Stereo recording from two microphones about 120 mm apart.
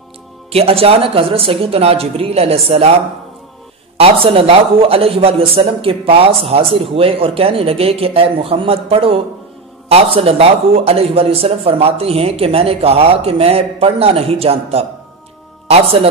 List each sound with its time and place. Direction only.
0.5 s speech: 55° right (ahead or behind)
4.0 s speech: 50° right (ahead or behind)